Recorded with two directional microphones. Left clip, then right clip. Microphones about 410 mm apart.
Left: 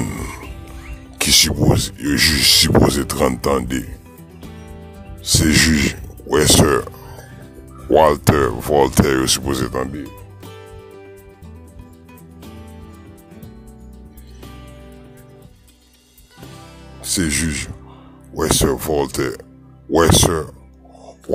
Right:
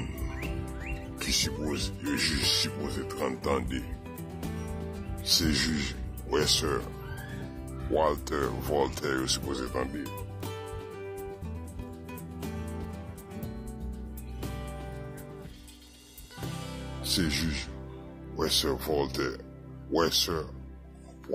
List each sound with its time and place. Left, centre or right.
1.1 s speech: left
4.2 s music: centre
5.2 s speech: centre
7.9 s speech: centre
10.0 s music: centre
16.3 s music: centre
17.0 s speech: centre